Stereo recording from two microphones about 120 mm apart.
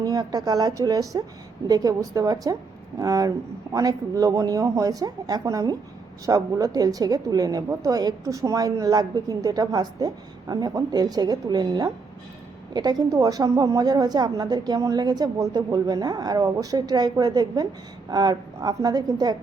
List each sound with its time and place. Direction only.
0.0 s a woman's voice: 35° right (ahead or behind)